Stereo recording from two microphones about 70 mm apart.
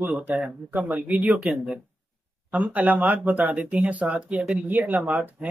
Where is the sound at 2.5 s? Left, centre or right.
Right.